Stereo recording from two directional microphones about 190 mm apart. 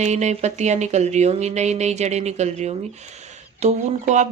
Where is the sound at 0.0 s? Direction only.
35° right (ahead or behind).